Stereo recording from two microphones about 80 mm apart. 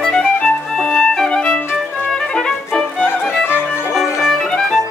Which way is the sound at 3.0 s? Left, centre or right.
Left.